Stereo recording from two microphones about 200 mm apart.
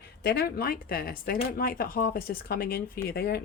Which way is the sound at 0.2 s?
55° left (ahead or behind).